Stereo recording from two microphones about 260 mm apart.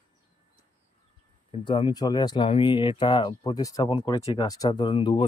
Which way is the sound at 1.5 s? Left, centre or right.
Centre.